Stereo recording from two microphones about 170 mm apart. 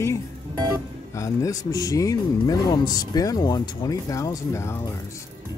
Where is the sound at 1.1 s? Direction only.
20° left (ahead or behind).